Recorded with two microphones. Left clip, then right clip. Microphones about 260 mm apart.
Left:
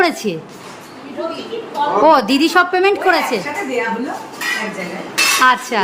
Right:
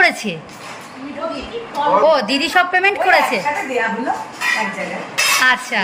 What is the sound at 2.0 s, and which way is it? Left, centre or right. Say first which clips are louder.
A woman's voice: left 3 dB; centre.